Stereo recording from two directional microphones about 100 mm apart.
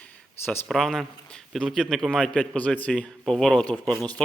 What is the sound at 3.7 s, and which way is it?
Speech, 10° right (ahead or behind).